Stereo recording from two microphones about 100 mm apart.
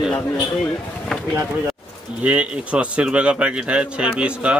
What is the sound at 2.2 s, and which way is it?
A man's voice, 15° right (ahead or behind).